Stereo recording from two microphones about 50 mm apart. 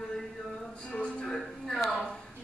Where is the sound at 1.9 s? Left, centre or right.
Left.